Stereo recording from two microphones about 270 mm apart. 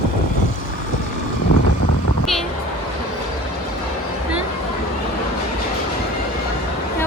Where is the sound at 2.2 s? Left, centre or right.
Centre.